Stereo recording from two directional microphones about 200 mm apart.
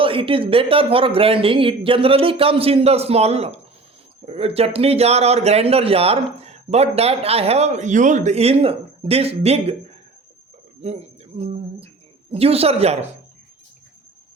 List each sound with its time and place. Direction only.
0.0 s speech: 25° right (ahead or behind)
11.3 s speech: 30° right (ahead or behind)